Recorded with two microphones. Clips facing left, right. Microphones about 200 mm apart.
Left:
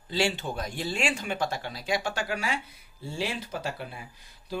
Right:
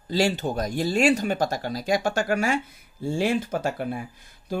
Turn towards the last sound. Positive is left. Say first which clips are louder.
# right 10 dB
turn(degrees=-50)  # may be behind; listen again after turning